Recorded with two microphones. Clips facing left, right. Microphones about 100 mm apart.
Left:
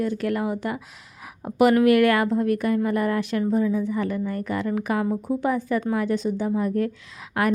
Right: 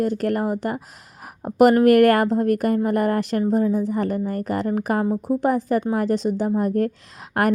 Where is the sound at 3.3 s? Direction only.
35° right (ahead or behind).